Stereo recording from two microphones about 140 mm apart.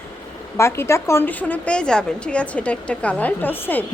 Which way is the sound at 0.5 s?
20° left (ahead or behind).